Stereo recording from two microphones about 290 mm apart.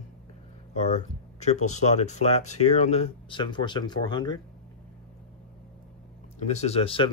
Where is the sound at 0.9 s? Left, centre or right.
Left.